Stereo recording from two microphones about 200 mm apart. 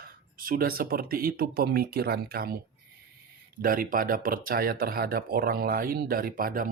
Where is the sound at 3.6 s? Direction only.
45° right (ahead or behind).